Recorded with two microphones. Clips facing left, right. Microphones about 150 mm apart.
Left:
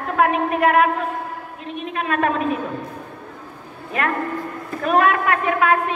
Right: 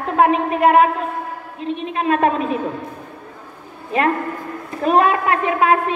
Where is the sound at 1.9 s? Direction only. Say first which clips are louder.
Right 3 dB; 30° right (ahead or behind).